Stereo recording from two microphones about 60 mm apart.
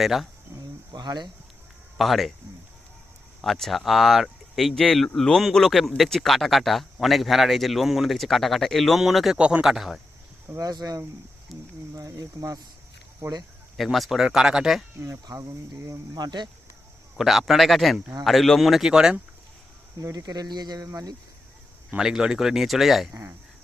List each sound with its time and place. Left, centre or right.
0.0 s speech: centre
2.0 s speech: centre
3.4 s speech: centre
9.4 s speech: centre
9.6 s speech: centre
10.6 s speech: right
11.5 s a sound: centre
11.9 s speech: right
13.7 s speech: centre
15.4 s speech: right
17.2 s speech: centre
20.0 s speech: right
21.9 s speech: centre